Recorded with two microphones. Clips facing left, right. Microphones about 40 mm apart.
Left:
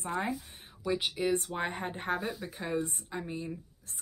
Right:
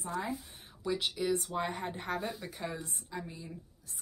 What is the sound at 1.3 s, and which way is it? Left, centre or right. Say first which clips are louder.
Speech: left 2 dB; left.